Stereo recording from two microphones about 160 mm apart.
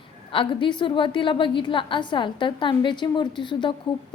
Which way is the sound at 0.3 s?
30° left (ahead or behind).